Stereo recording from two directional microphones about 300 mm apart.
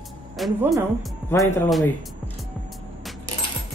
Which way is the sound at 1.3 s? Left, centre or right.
Centre.